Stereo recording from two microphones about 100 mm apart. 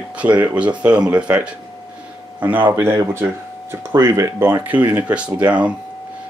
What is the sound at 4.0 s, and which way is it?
Speech, 30° right (ahead or behind).